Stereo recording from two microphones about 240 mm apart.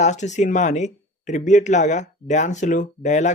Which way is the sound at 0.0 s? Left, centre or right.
Left.